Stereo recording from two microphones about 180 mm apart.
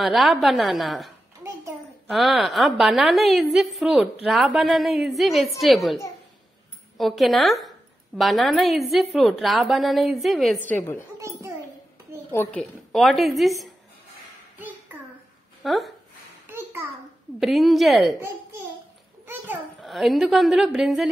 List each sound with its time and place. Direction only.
0.0 s a woman's voice: centre (ahead or behind)
7.0 s a woman's voice: centre (ahead or behind)
11.1 s a child's voice: 15° right (ahead or behind)
12.3 s a woman's voice: 10° left (ahead or behind)
15.6 s speech: centre (ahead or behind)
16.4 s a sound: 15° right (ahead or behind)
17.4 s a woman's voice: centre (ahead or behind)
19.2 s a sound: 10° right (ahead or behind)
19.8 s a woman's voice: centre (ahead or behind)